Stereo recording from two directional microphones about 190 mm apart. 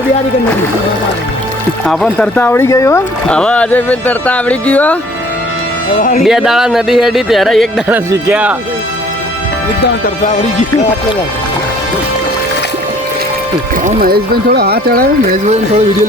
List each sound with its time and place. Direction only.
1.9 s speech: centre (ahead or behind); by 3.0 s 15° left (ahead or behind)
3.2 s speech: 5° left (ahead or behind)
6.0 s speech: 45° left (ahead or behind)
6.2 s speech: centre (ahead or behind)
10.2 s music: 40° left (ahead or behind)
13.8 s speech: 45° right (ahead or behind)